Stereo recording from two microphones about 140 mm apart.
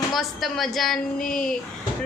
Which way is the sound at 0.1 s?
Centre (ahead or behind).